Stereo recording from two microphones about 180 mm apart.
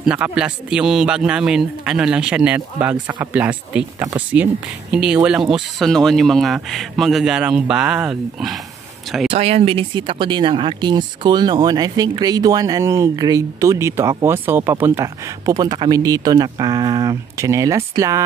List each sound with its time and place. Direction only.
0.0 s speech: 5° right (ahead or behind)
9.3 s speech: 35° right (ahead or behind); by 18.2 s 15° right (ahead or behind)